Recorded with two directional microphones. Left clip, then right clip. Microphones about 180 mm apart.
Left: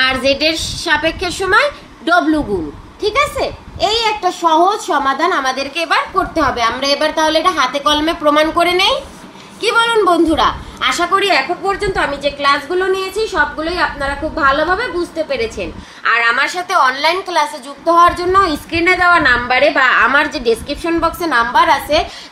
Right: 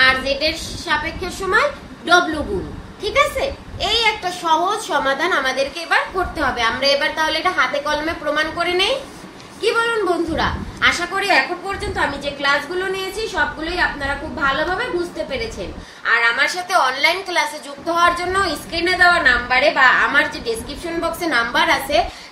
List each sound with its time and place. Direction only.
0.0 s a woman's voice: 75° left (ahead or behind)